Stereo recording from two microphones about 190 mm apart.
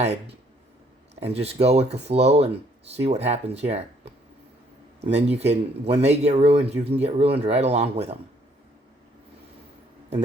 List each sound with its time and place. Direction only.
1.2 s speech: 35° right (ahead or behind)